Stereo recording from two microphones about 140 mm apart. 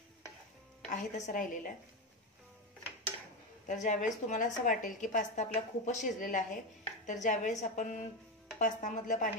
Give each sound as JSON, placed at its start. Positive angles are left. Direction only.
{"t": 0.8, "sound": "a woman's voice", "side_deg": 60}
{"t": 3.6, "sound": "a woman's voice", "side_deg": 60}